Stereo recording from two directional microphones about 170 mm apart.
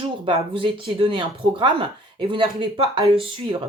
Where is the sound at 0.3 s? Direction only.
30° right (ahead or behind).